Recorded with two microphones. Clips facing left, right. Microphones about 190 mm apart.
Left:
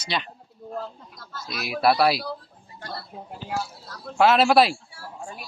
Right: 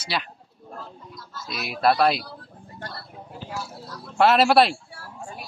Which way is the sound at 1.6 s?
5° left (ahead or behind).